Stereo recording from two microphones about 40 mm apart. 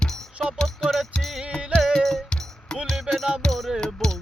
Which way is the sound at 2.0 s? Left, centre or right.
Centre.